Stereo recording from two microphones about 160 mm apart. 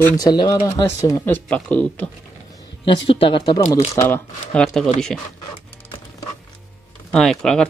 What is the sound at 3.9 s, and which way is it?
Speech, 10° left (ahead or behind).